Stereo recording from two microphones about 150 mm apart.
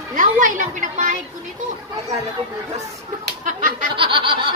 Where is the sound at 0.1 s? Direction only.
60° right (ahead or behind).